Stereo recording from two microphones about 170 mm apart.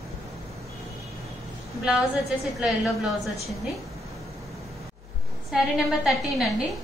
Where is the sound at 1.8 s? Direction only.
Centre (ahead or behind).